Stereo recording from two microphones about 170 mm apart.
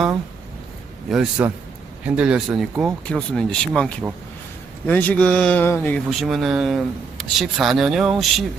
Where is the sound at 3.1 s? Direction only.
5° left (ahead or behind).